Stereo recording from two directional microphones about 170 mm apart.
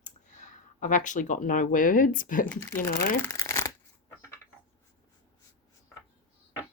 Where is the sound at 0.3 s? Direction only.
45° left (ahead or behind).